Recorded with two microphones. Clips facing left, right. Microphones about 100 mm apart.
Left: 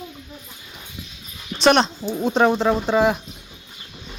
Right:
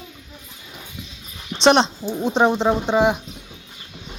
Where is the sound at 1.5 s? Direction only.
25° right (ahead or behind).